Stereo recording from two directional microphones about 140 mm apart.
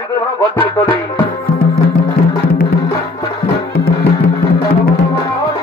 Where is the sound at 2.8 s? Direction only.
20° left (ahead or behind).